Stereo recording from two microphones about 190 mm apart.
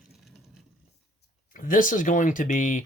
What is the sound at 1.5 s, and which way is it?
Speech, 45° left (ahead or behind).